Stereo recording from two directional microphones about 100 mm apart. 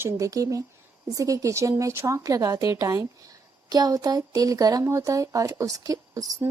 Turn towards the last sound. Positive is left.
turn(degrees=-35)  # may be behind; listen again after turning